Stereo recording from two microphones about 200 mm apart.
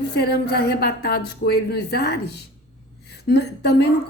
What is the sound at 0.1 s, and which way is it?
A woman's voice, 55° left (ahead or behind).